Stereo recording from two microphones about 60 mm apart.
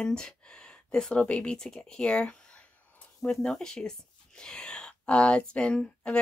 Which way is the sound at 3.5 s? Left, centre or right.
Centre.